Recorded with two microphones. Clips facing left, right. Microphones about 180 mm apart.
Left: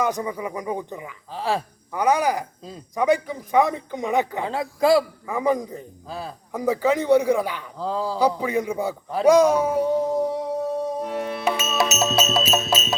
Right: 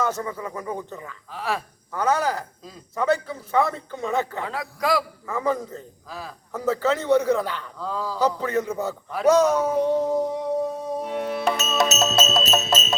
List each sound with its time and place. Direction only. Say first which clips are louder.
0.0 s a man's voice: left 2 dB; 15° left (ahead or behind)
1.3 s a man's voice: left 3 dB; 30° left (ahead or behind)
1.9 s a man's voice: left 2 dB; 15° left (ahead or behind)
4.4 s a man's voice: left 6 dB; 25° left (ahead or behind)
5.2 s a man's voice: left 3 dB; 15° left (ahead or behind)
6.1 s a man's voice: left 4 dB; 30° left (ahead or behind)
6.5 s a man's voice: left 2 dB; 15° left (ahead or behind)
7.8 s a man's voice: left 5 dB; 30° left (ahead or behind)
8.2 s a man's voice: even; 10° left (ahead or behind)
11.0 s music: even; centre (ahead or behind)